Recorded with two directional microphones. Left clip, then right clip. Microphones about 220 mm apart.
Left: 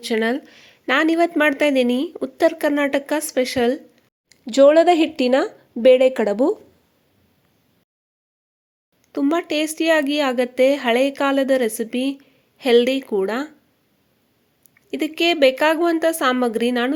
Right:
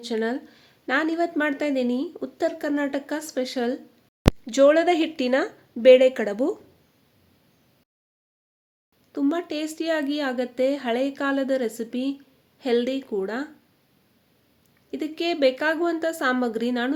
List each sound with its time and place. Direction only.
0.0 s a woman's voice: 15° left (ahead or behind)
9.1 s a woman's voice: 15° left (ahead or behind)
14.8 s a woman's voice: 15° left (ahead or behind)